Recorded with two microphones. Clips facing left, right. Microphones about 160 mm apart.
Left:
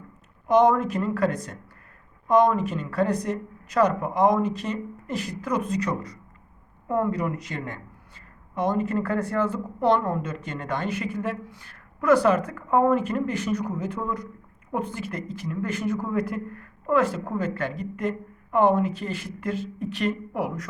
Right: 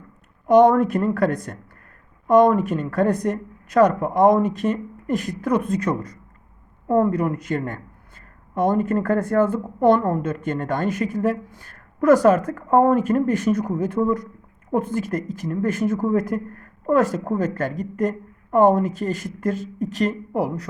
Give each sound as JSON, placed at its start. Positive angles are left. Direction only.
{"t": 0.5, "sound": "speech", "side_deg": -50}